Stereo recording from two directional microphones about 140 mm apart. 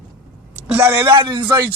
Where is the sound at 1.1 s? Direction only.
35° right (ahead or behind).